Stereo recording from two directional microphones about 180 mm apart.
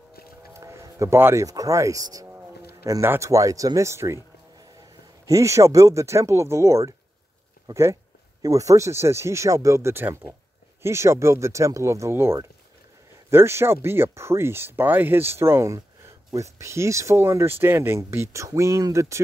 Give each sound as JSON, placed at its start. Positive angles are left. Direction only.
{"t": 0.5, "sound": "speech", "side_deg": -15}
{"t": 5.2, "sound": "speech", "side_deg": -15}